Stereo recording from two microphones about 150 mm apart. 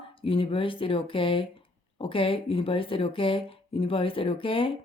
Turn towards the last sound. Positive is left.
turn(degrees=35)  # may be behind; listen again after turning